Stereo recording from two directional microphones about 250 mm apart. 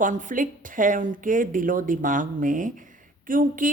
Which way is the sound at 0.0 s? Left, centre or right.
Right.